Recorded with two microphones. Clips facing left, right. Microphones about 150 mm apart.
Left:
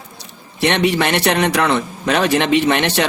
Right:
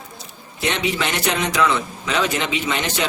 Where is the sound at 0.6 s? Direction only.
70° left (ahead or behind).